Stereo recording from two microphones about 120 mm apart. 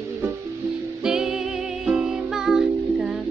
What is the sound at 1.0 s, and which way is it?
Music, 5° right (ahead or behind).